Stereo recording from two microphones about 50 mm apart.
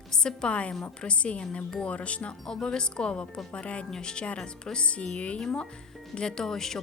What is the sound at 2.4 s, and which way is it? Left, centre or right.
A woman's voice, centre.